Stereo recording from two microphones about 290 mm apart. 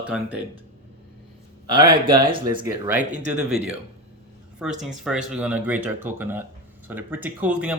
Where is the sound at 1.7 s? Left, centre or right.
Centre.